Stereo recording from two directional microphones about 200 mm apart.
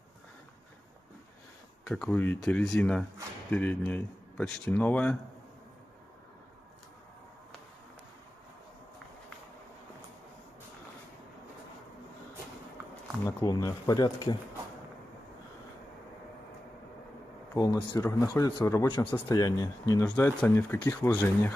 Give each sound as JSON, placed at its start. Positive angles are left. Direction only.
{"t": 1.9, "sound": "speech", "side_deg": 5}
{"t": 13.2, "sound": "speech", "side_deg": 15}
{"t": 17.9, "sound": "speech", "side_deg": 15}